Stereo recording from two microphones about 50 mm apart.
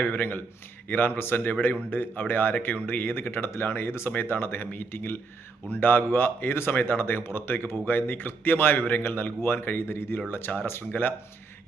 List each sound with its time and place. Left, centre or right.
0.0 s speech: left